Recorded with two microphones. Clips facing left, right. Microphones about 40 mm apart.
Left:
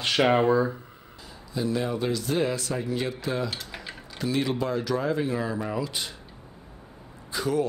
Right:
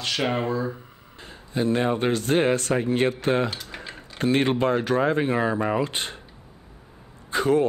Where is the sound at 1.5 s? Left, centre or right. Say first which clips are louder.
Right 5 dB; right.